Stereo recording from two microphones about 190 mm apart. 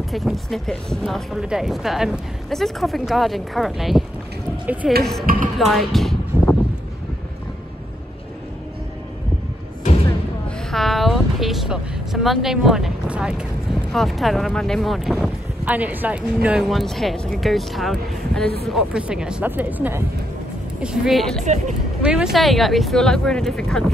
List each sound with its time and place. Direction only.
0.1 s speech: centre (ahead or behind)
5.2 s speech: 50° right (ahead or behind)
5.6 s a sound: centre (ahead or behind)
10.7 s speech: centre (ahead or behind)